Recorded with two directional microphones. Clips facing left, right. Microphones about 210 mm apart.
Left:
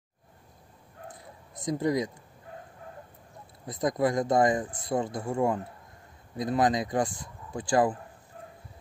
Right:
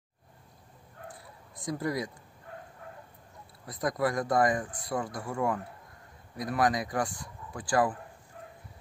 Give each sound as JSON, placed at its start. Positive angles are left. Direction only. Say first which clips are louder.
{"t": 1.0, "sound": "bow-wow", "louder": "left 2 dB", "side_deg": 20}
{"t": 3.6, "sound": "speech", "louder": "left 3 dB", "side_deg": 20}